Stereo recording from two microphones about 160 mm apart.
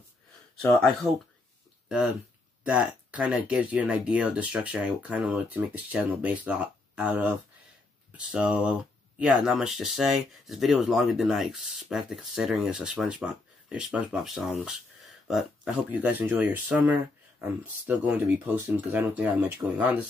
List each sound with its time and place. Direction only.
0.6 s speech: 5° left (ahead or behind)
1.9 s speech: 5° right (ahead or behind)